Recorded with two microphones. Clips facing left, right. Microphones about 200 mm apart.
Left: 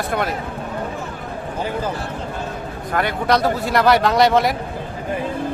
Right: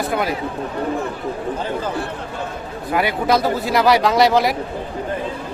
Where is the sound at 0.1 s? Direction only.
Centre (ahead or behind).